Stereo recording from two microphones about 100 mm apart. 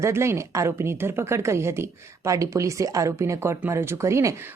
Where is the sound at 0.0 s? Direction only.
25° right (ahead or behind).